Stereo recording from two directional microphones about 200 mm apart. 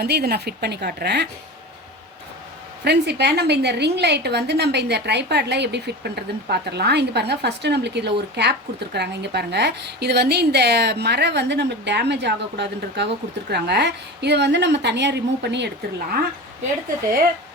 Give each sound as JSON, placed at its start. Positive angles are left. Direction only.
{"t": 0.0, "sound": "a woman's voice", "side_deg": -55}
{"t": 2.8, "sound": "a woman's voice", "side_deg": -55}